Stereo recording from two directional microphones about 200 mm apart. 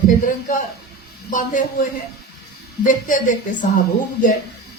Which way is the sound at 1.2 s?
40° left (ahead or behind).